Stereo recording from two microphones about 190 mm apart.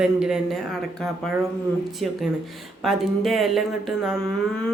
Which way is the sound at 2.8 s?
Centre (ahead or behind).